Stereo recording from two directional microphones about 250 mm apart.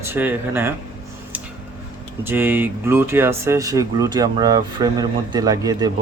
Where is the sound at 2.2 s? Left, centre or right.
Centre.